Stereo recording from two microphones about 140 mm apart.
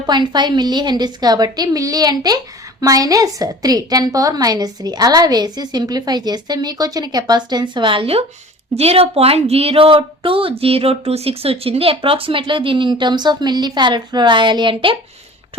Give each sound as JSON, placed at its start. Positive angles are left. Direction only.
{"t": 0.0, "sound": "a woman's voice", "side_deg": -30}